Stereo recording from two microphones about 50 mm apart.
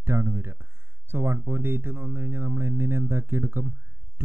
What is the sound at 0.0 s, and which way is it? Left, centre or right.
Speech, right.